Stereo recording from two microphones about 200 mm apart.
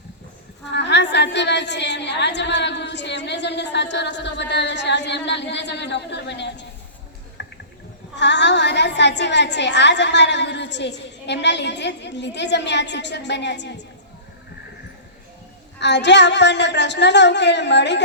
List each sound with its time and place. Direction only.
0.7 s a woman's voice: 60° left (ahead or behind)
7.4 s a sound: 60° left (ahead or behind)
8.1 s a woman's voice: 60° left (ahead or behind)
15.8 s a woman's voice: 60° left (ahead or behind)